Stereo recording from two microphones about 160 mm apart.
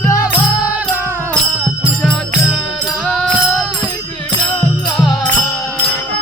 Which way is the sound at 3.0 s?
5° left (ahead or behind).